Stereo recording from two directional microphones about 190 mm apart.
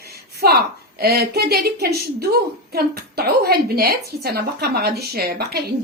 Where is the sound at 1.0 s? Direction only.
55° right (ahead or behind).